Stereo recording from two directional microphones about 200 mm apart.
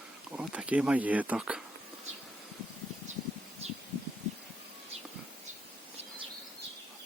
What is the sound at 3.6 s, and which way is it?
Rustling leaves, 30° right (ahead or behind).